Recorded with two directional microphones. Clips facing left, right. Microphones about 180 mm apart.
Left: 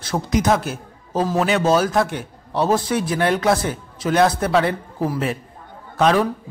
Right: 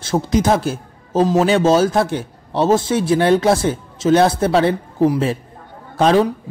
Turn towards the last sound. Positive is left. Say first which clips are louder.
# right 3 dB
turn(degrees=-30)  # may be behind; listen again after turning